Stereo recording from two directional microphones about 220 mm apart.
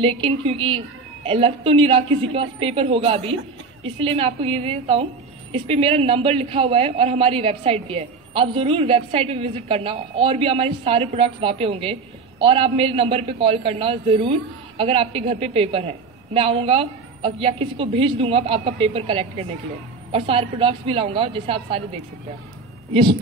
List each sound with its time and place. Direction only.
0.0 s a woman's voice: 25° right (ahead or behind)